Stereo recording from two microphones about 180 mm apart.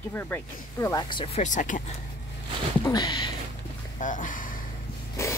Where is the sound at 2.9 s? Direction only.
25° left (ahead or behind).